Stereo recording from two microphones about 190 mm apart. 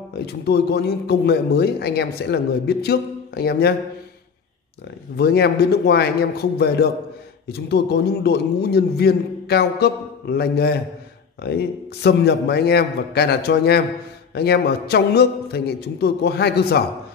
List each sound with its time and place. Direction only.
0.3 s speech: 60° left (ahead or behind)
5.1 s speech: 60° left (ahead or behind)